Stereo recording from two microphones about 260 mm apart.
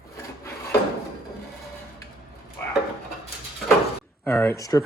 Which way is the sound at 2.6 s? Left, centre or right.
Centre.